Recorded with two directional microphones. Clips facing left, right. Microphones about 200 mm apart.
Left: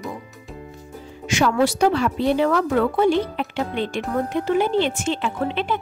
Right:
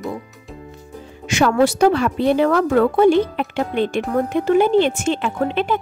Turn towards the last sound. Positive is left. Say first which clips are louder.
# right 4 dB
turn(degrees=-50)  # may be behind; listen again after turning